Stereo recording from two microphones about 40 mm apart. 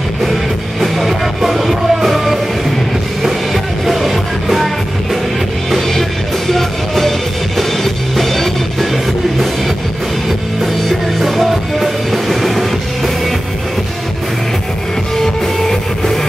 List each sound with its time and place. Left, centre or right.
0.2 s music: centre
5.7 s music: centre
10.6 s music: centre
15.6 s music: centre